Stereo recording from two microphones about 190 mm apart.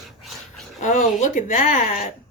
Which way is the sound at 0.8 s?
40° left (ahead or behind).